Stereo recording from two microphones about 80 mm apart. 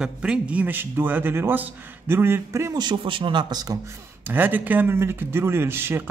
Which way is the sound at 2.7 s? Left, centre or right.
Right.